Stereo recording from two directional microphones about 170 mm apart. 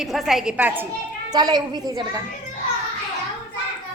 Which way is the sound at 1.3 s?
25° right (ahead or behind).